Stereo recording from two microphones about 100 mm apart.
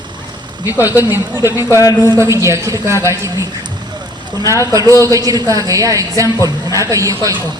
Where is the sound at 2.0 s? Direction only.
30° right (ahead or behind).